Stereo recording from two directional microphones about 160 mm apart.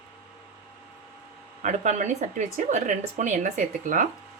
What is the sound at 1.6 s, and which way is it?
Speech, 50° right (ahead or behind).